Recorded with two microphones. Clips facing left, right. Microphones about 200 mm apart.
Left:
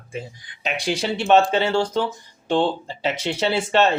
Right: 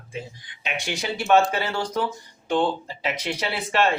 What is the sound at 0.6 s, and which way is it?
Speech, 35° left (ahead or behind).